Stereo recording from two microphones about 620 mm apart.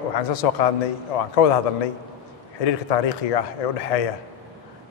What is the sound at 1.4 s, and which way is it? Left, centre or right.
Speech, left.